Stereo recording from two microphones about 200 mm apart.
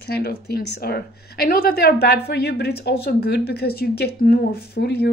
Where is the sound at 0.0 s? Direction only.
55° left (ahead or behind).